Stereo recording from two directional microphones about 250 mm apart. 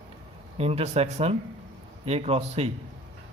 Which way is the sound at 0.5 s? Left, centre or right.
Right.